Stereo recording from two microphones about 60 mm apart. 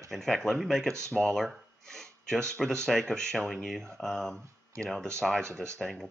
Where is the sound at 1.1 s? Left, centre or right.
Centre.